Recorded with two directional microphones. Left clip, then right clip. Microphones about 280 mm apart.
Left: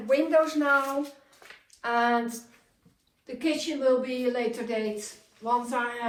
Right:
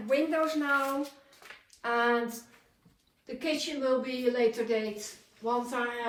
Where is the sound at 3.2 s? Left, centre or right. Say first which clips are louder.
Left 3 dB; left.